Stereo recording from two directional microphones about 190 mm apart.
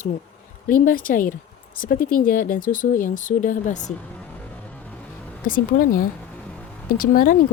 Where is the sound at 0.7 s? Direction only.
45° left (ahead or behind).